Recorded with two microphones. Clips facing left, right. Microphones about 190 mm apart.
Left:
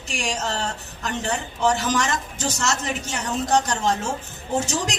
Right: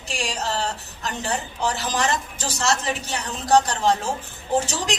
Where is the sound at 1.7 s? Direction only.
35° right (ahead or behind).